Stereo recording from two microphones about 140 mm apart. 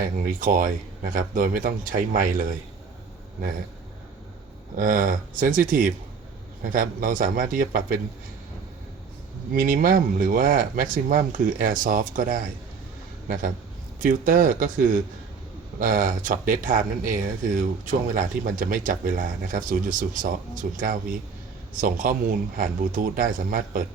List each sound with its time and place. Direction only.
0.0 s speech: 75° right (ahead or behind)
4.8 s speech: 75° right (ahead or behind)
9.5 s speech: 75° right (ahead or behind)